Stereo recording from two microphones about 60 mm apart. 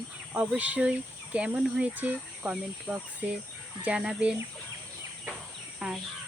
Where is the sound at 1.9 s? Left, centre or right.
Right.